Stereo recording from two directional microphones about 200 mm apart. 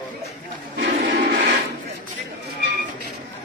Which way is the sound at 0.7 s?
50° right (ahead or behind).